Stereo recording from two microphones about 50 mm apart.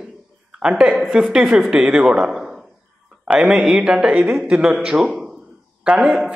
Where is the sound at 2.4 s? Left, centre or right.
Centre.